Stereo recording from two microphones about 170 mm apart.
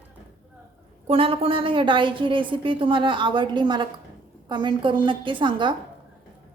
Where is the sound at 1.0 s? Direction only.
35° right (ahead or behind).